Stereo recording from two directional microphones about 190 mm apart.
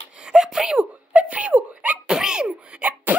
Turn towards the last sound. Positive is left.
turn(degrees=-5)  # may be behind; listen again after turning